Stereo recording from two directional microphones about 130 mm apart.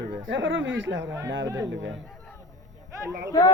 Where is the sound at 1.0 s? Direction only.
20° right (ahead or behind).